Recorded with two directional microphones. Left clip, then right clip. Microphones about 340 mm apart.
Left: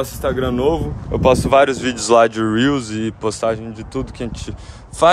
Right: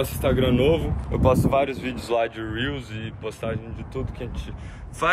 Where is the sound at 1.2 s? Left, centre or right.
Left.